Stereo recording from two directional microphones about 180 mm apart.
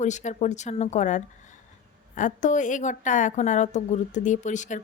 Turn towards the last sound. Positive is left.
turn(degrees=45)  # may be behind; listen again after turning